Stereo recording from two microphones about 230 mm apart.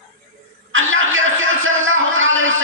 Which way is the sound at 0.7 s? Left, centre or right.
Right.